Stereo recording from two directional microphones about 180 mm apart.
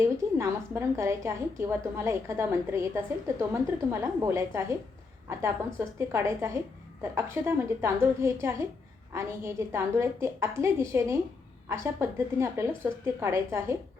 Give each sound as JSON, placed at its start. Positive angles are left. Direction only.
{"t": 0.0, "sound": "a woman's voice", "side_deg": -15}
{"t": 4.0, "sound": "a woman's voice", "side_deg": -15}